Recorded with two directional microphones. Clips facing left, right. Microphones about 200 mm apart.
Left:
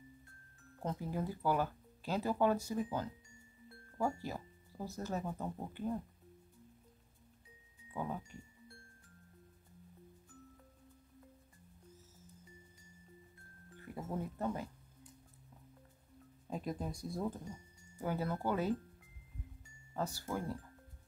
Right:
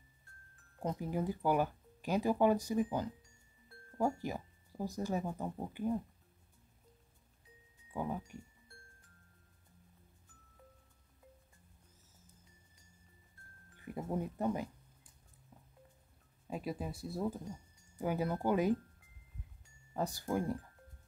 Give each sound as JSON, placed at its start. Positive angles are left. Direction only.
{"t": 0.7, "sound": "speech", "side_deg": -15}
{"t": 8.0, "sound": "speech", "side_deg": -10}
{"t": 13.9, "sound": "speech", "side_deg": -15}
{"t": 16.4, "sound": "speech", "side_deg": -5}
{"t": 19.9, "sound": "speech", "side_deg": -15}